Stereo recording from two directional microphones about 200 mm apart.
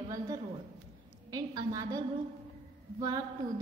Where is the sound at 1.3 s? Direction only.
20° right (ahead or behind).